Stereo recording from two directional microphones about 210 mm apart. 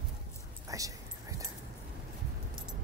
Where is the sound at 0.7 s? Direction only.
15° right (ahead or behind).